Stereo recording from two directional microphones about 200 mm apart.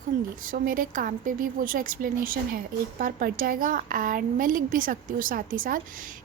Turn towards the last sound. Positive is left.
turn(degrees=-40)  # may be behind; listen again after turning